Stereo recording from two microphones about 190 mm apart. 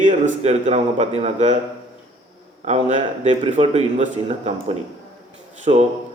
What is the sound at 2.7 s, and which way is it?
A man's voice, 40° right (ahead or behind).